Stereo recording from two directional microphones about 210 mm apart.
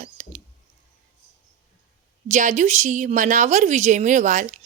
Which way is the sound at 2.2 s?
35° right (ahead or behind).